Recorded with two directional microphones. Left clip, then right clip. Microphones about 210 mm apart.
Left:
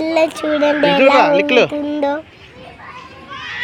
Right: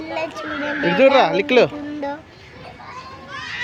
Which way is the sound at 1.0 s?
5° right (ahead or behind).